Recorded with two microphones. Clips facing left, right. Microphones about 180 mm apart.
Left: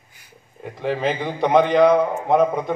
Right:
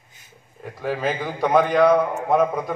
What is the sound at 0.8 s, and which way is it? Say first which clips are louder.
A man's voice: left 2 dB; 25° left (ahead or behind).